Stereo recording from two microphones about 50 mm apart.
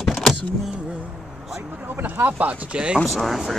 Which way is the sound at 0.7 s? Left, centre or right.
Centre.